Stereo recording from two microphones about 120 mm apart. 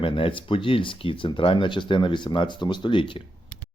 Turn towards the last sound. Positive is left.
turn(degrees=40)  # may be behind; listen again after turning